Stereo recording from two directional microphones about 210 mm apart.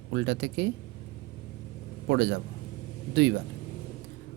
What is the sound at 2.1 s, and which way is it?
Speech, 60° right (ahead or behind).